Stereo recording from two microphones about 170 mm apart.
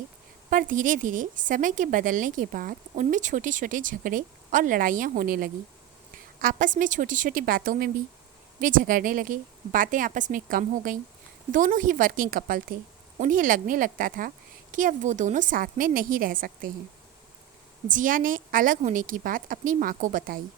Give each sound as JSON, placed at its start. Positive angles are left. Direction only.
{"t": 0.5, "sound": "a woman's voice", "side_deg": -50}
{"t": 17.8, "sound": "a woman's voice", "side_deg": -50}